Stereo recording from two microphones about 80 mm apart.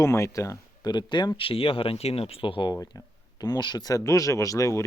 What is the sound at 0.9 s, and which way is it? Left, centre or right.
Speech, left.